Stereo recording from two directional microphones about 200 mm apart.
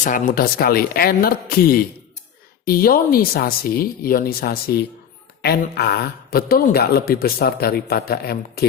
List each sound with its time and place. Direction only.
0.0 s speech: 45° left (ahead or behind)